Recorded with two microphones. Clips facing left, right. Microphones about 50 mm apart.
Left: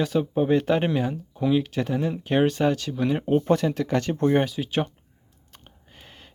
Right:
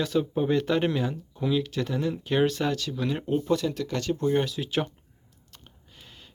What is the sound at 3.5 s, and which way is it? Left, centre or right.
Speech, left.